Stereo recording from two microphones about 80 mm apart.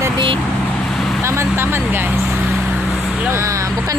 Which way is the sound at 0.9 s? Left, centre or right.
Centre.